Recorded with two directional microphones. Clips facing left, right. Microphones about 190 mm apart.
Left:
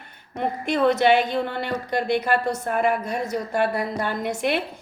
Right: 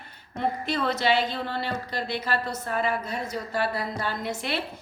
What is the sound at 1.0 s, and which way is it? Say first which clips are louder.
A woman's voice: left 6 dB; 55° left (ahead or behind).